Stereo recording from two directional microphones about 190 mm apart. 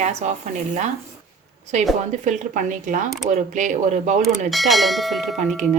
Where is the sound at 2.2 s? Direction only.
40° right (ahead or behind).